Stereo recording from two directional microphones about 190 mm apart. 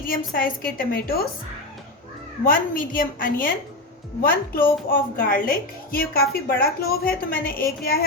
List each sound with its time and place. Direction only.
0.0 s a woman's voice: 50° left (ahead or behind)
2.4 s a woman's voice: 50° left (ahead or behind)